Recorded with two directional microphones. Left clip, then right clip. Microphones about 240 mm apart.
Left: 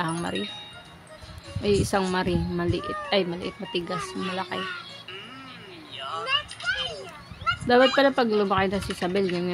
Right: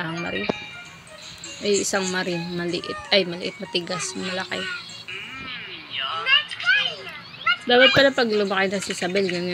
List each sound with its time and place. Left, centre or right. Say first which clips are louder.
0.0 s music: right 1 dB; left
1.6 s speech: right 1 dB; left
6.1 s a sound: right 7 dB; centre
7.8 s speech: right 6 dB; centre